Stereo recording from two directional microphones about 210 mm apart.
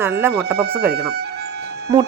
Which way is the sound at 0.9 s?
50° right (ahead or behind).